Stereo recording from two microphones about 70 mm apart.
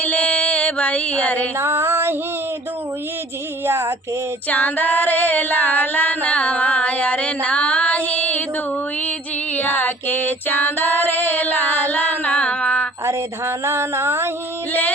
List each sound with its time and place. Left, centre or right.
0.0 s music: left
1.5 s female singing: right
3.7 s female singing: right
4.4 s female singing: left
9.6 s child singing: left
11.1 s a sound: left
13.1 s a sound: right
14.7 s singing: left